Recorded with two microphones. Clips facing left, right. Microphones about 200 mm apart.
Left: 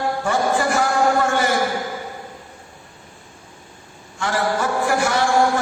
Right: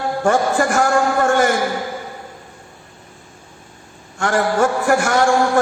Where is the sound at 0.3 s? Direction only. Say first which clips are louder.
Right 4 dB; 50° right (ahead or behind).